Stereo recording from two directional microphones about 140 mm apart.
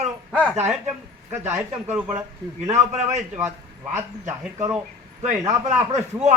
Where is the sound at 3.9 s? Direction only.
20° right (ahead or behind).